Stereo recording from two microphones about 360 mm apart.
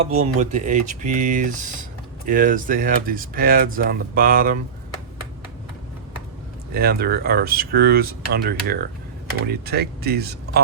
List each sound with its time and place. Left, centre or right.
0.0 s speech: centre
6.7 s speech: right